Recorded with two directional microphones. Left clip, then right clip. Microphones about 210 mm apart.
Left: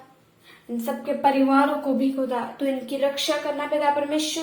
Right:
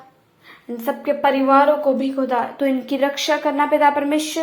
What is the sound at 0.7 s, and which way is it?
A woman's voice, 25° right (ahead or behind).